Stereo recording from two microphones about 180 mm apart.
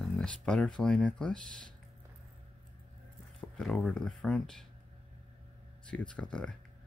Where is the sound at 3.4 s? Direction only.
5° left (ahead or behind).